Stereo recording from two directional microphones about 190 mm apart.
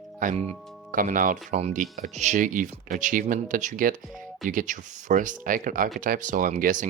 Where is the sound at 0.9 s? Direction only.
45° right (ahead or behind).